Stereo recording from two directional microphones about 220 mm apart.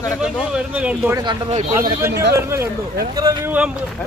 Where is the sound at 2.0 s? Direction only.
10° right (ahead or behind).